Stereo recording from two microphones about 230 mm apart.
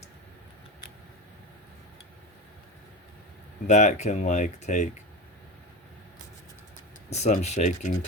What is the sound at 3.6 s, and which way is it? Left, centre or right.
Speech, left.